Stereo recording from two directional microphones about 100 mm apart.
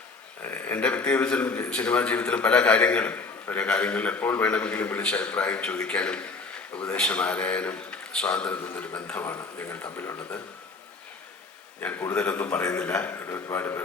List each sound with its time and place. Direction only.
0.4 s a man's voice: 20° left (ahead or behind)
11.8 s a man's voice: 20° left (ahead or behind)